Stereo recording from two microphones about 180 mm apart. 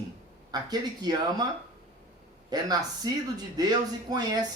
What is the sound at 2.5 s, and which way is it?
Speech, 20° right (ahead or behind).